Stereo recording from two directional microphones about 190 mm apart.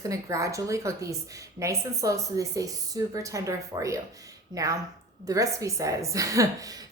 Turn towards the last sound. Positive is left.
turn(degrees=-20)  # may be behind; listen again after turning